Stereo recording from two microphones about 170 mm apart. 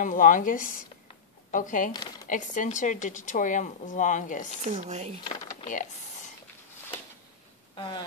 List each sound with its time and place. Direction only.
0.0 s speech: 50° left (ahead or behind)
1.9 s speech: 25° left (ahead or behind)
2.2 s speech: 50° left (ahead or behind)
4.6 s speech: 45° right (ahead or behind)
5.2 s speech: 25° left (ahead or behind)
5.7 s a sound: 50° left (ahead or behind)
7.7 s speech: 25° left (ahead or behind)